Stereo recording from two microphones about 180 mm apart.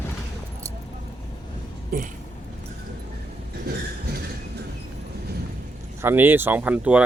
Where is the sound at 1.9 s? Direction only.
55° right (ahead or behind).